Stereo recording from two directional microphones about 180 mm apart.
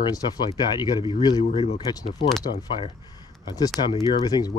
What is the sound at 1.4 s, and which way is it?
Speech, 40° left (ahead or behind).